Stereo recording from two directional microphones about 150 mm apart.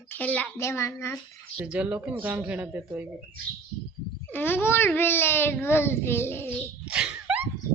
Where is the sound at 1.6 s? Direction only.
10° right (ahead or behind).